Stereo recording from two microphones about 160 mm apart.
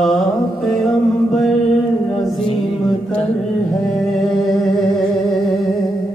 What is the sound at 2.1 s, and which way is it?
Music, 35° left (ahead or behind).